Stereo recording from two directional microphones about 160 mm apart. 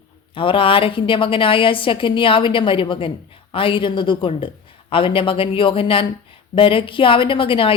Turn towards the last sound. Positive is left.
turn(degrees=35)  # may be behind; listen again after turning